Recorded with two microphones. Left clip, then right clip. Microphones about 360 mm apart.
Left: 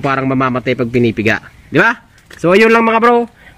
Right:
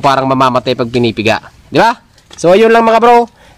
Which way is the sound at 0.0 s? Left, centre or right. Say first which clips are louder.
Right 6 dB; right.